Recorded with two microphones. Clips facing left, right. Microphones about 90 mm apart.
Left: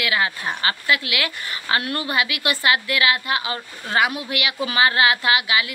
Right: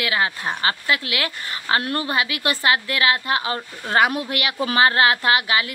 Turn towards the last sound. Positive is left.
turn(degrees=-40)  # may be behind; listen again after turning